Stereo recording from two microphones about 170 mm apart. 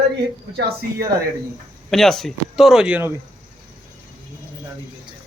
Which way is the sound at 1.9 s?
Centre (ahead or behind).